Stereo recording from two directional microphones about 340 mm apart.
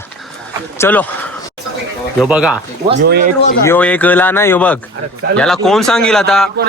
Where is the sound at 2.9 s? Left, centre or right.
Right.